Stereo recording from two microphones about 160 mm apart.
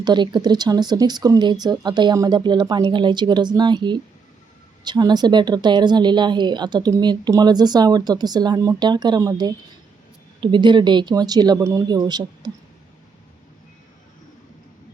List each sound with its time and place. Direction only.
0.0 s speech: 30° right (ahead or behind)